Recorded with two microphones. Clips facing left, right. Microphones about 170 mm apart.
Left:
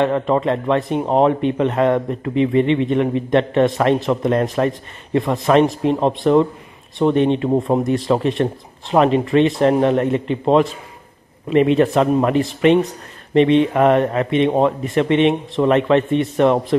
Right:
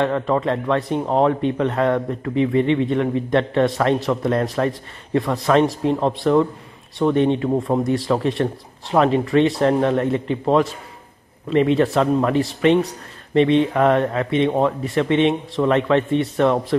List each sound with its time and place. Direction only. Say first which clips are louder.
0.0 s speech: left 2 dB; 20° left (ahead or behind)